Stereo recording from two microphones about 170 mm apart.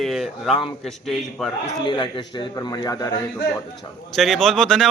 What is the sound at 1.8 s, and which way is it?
A man's voice, 25° left (ahead or behind).